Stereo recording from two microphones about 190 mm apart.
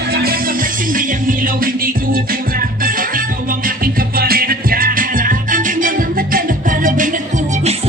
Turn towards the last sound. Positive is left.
turn(degrees=-45)  # may be behind; listen again after turning